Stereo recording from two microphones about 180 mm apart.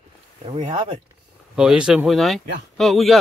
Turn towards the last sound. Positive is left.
turn(degrees=0)  # may be behind; listen again after turning